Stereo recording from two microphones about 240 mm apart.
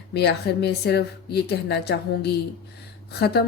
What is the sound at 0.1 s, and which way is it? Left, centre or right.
Speech, left.